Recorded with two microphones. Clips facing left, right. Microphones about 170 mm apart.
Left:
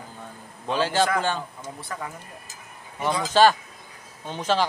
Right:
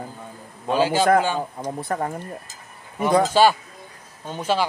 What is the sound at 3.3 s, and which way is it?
Speech, 10° right (ahead or behind).